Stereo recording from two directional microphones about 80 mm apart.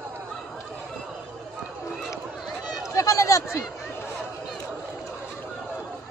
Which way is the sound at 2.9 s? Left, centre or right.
Left.